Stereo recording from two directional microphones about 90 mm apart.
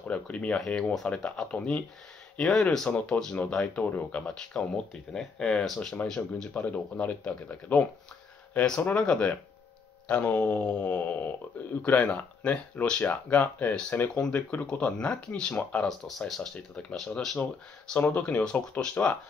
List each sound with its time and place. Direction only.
0.1 s speech: 15° left (ahead or behind)
17.4 s speech: 15° left (ahead or behind)